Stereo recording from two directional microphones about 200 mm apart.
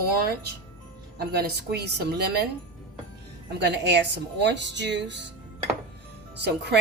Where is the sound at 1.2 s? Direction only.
55° right (ahead or behind).